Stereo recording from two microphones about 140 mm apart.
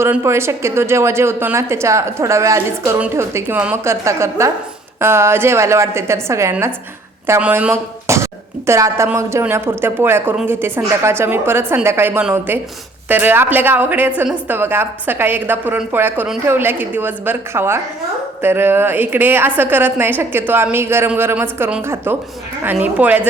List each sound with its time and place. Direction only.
0.0 s a woman's voice: 20° right (ahead or behind)